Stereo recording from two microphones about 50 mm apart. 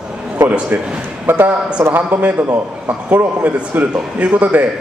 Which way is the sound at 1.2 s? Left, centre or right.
Right.